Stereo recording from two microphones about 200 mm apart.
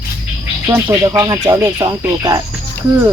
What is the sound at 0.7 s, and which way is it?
Speech, 10° right (ahead or behind).